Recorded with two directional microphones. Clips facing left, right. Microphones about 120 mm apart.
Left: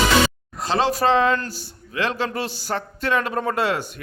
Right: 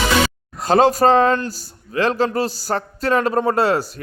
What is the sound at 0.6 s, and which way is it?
A man's voice, 45° right (ahead or behind).